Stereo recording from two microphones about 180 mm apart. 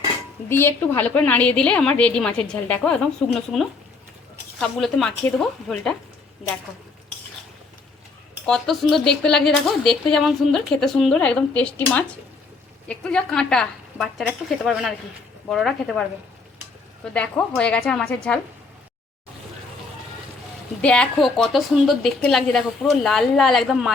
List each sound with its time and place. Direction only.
0.4 s a woman's voice: 15° left (ahead or behind)
8.4 s speech: centre (ahead or behind)
17.2 s speech: 5° left (ahead or behind)
20.8 s speech: 5° left (ahead or behind)